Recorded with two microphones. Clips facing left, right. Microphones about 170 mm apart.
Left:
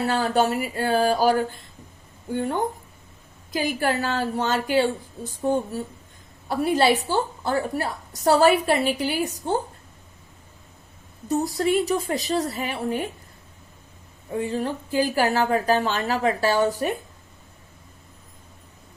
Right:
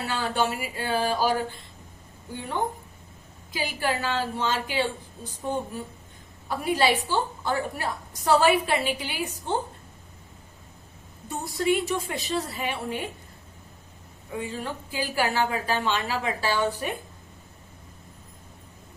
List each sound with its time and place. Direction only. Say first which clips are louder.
0.0 s speech: left 5 dB; 40° left (ahead or behind)
3.8 s a woman's voice: even; 45° left (ahead or behind)
11.3 s a woman's voice: left 4 dB; 40° left (ahead or behind)
14.3 s a woman's voice: left 6 dB; 40° left (ahead or behind)